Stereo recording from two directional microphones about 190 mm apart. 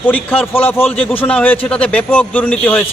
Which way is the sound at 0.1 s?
10° left (ahead or behind).